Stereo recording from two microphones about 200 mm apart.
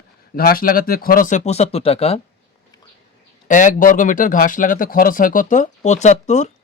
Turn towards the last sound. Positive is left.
turn(degrees=35)  # may be behind; listen again after turning